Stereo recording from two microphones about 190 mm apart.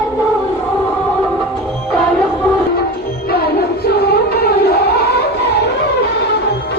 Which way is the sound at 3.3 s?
55° left (ahead or behind).